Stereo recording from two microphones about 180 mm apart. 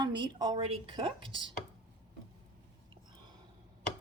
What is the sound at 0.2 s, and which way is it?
Speech, 25° right (ahead or behind).